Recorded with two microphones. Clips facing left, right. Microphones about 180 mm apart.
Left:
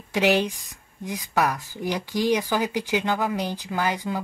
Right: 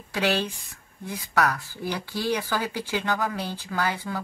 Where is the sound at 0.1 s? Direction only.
15° left (ahead or behind).